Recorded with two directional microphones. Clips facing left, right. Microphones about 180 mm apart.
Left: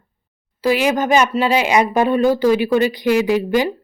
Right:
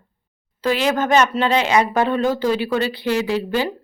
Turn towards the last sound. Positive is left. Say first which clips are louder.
# left 4 dB
turn(degrees=15)  # may be behind; listen again after turning